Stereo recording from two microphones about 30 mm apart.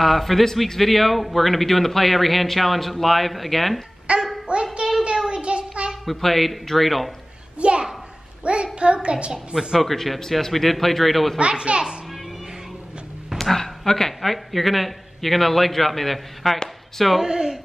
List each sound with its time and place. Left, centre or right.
0.0 s a man's voice: centre
4.1 s a sound: right
5.0 s a sound: right
5.4 s child singing: right
6.0 s a man's voice: centre
7.5 s a sound: right
8.7 s a child's voice: right
9.3 s a woman's voice: centre
9.8 s a man's voice: centre
11.3 s a child's voice: right
13.4 s speech: centre
14.2 s a man's voice: centre
17.2 s a woman's voice: centre